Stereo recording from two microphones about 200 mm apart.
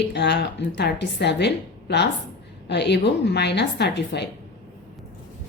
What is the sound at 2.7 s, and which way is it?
A woman's voice, 55° left (ahead or behind).